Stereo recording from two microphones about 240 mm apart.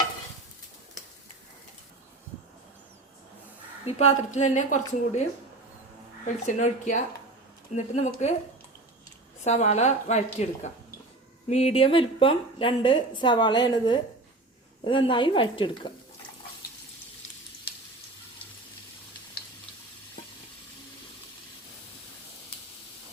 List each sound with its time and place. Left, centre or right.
3.8 s a woman's voice: left
6.4 s a woman's voice: left
9.4 s a woman's voice: left